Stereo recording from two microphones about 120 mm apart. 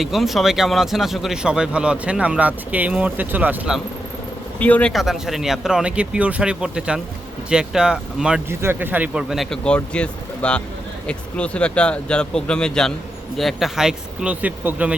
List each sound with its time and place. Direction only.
0.0 s speech: centre (ahead or behind)
4.6 s speech: 10° left (ahead or behind)
4.9 s speech: centre (ahead or behind)
8.4 s speech: 20° right (ahead or behind)
9.3 s speech: centre (ahead or behind); by 14.9 s 15° right (ahead or behind)